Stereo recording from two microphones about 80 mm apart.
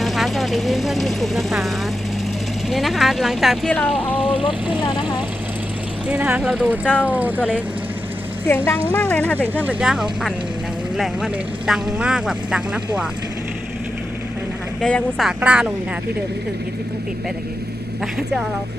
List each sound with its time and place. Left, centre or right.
0.0 s speech: centre
3.7 s speech: centre
4.3 s speech: left
6.1 s speech: centre
6.7 s speech: centre
7.1 s speech: right
8.4 s speech: left
9.4 s speech: right
9.8 s speech: centre
14.8 s speech: centre
15.4 s speech: centre
18.0 s speech: centre